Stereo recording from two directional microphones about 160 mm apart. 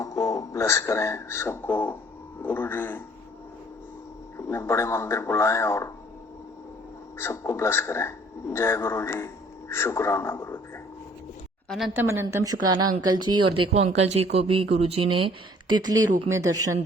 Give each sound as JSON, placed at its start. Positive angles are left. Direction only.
{"t": 0.0, "sound": "speech", "side_deg": 20}
{"t": 2.4, "sound": "a sound", "side_deg": 10}
{"t": 4.4, "sound": "a man's voice", "side_deg": 15}
{"t": 7.2, "sound": "a man's voice", "side_deg": 15}
{"t": 11.9, "sound": "a woman's voice", "side_deg": -15}
{"t": 15.7, "sound": "speech", "side_deg": -25}